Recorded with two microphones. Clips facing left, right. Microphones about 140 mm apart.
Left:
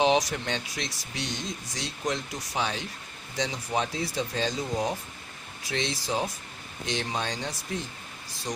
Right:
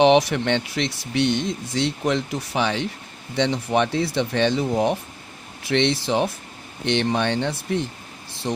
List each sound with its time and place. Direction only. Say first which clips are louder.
0.0 s speech: right 8 dB; 70° right (ahead or behind)